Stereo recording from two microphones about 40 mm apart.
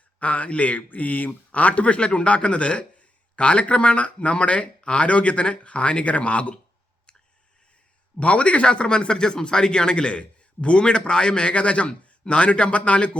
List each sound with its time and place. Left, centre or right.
0.2 s speech: left
8.1 s a man's voice: left